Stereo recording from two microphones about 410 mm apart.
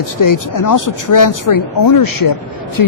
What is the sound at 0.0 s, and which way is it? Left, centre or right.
A woman's voice, left.